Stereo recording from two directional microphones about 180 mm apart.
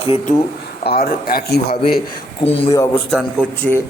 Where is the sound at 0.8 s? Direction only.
60° left (ahead or behind).